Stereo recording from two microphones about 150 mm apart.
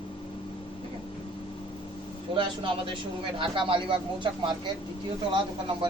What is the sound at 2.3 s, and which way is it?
Speech, 35° right (ahead or behind).